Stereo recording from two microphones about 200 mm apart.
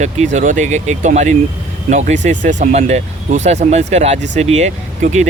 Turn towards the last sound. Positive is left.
turn(degrees=-35)  # may be behind; listen again after turning